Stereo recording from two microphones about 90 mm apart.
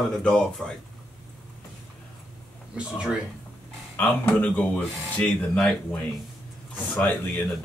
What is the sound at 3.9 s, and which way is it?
Speech, 20° left (ahead or behind).